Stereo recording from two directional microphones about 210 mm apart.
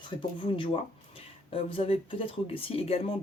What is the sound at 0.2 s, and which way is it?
Speech, 25° left (ahead or behind).